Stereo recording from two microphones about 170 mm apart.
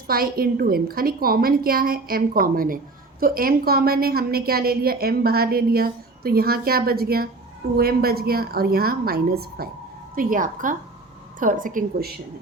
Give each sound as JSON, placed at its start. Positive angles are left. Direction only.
{"t": 0.1, "sound": "a woman's voice", "side_deg": -60}
{"t": 10.2, "sound": "a woman's voice", "side_deg": -50}